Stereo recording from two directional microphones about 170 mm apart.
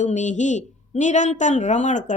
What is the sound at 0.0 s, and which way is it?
A woman's voice, 45° left (ahead or behind).